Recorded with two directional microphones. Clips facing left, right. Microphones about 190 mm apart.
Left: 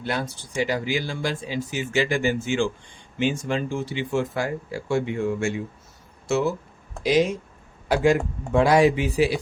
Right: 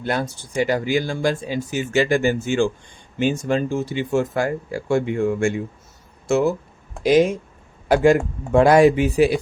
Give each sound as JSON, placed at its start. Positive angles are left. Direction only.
{"t": 0.0, "sound": "speech", "side_deg": -50}